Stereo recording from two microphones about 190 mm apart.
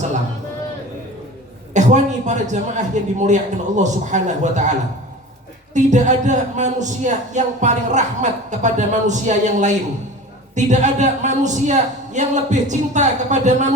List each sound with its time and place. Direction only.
1.7 s speech: 40° right (ahead or behind)
5.7 s speech: 40° right (ahead or behind)